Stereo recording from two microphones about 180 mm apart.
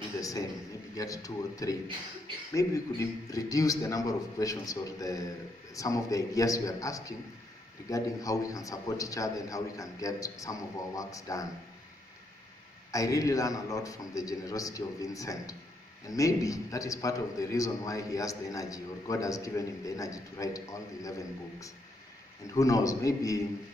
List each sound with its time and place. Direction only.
0.2 s a man's voice: 20° left (ahead or behind)
12.9 s a man's voice: 20° left (ahead or behind)